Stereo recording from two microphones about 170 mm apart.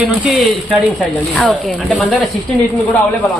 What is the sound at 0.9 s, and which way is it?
Speech, centre (ahead or behind).